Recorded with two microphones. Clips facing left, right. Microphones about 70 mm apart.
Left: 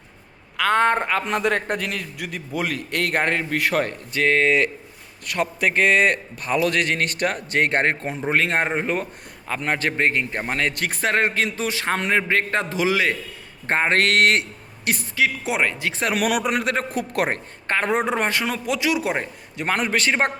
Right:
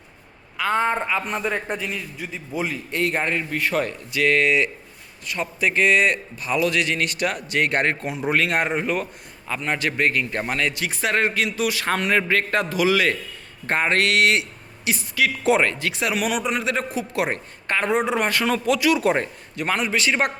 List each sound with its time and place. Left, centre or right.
0.5 s a man's voice: left
3.8 s a man's voice: left
5.2 s a man's voice: left
10.5 s a man's voice: left
15.4 s a man's voice: centre
15.8 s a man's voice: left
18.4 s a man's voice: centre
18.7 s a man's voice: left
18.9 s a man's voice: centre
19.6 s a man's voice: left